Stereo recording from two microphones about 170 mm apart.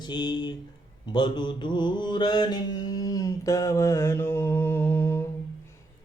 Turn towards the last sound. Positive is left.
turn(degrees=15)  # may be behind; listen again after turning